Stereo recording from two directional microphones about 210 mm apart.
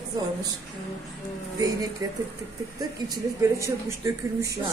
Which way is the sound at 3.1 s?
15° right (ahead or behind).